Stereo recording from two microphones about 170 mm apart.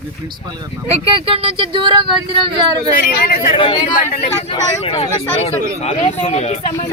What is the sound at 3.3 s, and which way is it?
Speech, 55° left (ahead or behind).